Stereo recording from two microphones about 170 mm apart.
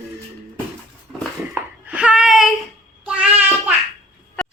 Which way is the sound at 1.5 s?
10° right (ahead or behind).